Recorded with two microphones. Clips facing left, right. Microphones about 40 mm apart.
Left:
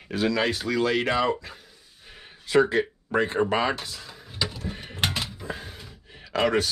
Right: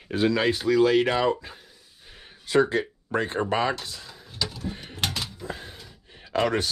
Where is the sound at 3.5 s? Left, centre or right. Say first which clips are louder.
Even; left.